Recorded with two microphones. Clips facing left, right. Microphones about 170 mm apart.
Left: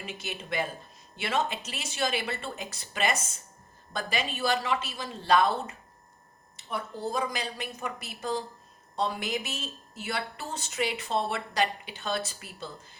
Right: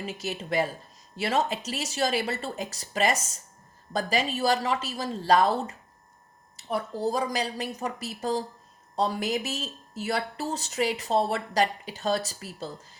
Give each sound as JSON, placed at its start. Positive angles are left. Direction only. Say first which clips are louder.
{"t": 0.0, "sound": "speech", "louder": "right 5 dB", "side_deg": -40}